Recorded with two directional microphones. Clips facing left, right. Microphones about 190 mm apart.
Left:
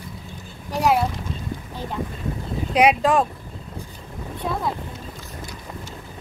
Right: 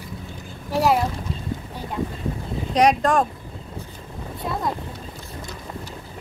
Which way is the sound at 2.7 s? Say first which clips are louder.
Even; 5° left (ahead or behind).